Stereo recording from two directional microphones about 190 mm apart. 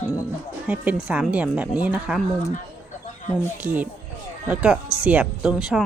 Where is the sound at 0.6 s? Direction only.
10° right (ahead or behind).